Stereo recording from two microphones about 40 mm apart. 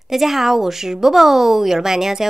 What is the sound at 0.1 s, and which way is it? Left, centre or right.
A woman's voice, centre.